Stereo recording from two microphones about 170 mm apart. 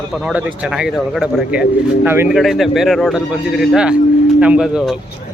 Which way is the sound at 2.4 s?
Centre (ahead or behind).